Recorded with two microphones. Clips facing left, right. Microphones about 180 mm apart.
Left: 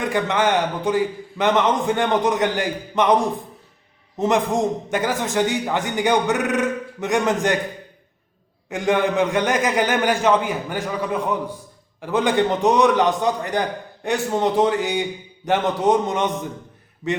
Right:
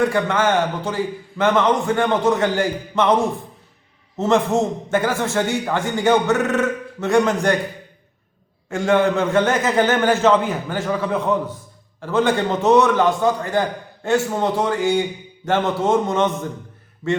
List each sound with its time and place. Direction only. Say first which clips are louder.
0.1 s a man's voice: right 1 dB; 15° left (ahead or behind)
4.2 s a man's voice: right 2 dB; 15° left (ahead or behind)
8.7 s a man's voice: right 2 dB; 15° left (ahead or behind)